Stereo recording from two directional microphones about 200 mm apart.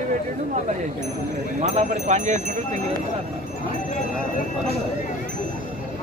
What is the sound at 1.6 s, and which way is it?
Speech, 35° right (ahead or behind).